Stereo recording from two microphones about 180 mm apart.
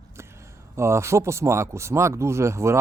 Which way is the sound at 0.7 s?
15° right (ahead or behind).